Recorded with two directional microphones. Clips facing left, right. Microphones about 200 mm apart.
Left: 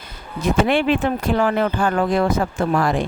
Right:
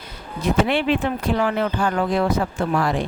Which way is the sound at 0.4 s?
50° left (ahead or behind).